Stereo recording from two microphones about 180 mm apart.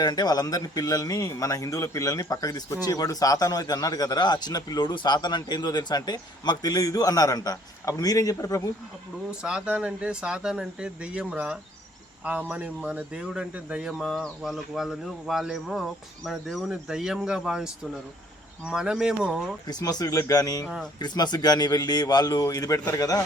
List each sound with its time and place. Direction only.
0.0 s speech: 20° left (ahead or behind)
9.4 s speech: 5° right (ahead or behind)
19.6 s speech: 20° left (ahead or behind)